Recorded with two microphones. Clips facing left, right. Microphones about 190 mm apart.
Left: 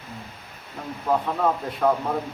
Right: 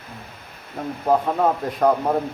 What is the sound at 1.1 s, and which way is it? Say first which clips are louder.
A man's voice: right 4 dB; 45° right (ahead or behind).